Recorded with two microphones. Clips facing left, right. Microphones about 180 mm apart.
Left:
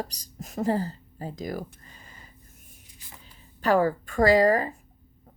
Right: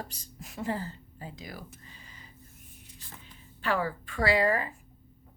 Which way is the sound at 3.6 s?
45° left (ahead or behind).